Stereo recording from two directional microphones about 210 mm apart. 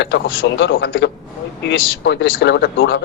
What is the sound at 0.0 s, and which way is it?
Speech, 60° left (ahead or behind).